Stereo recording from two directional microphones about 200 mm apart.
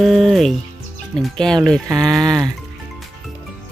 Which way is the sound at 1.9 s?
20° right (ahead or behind).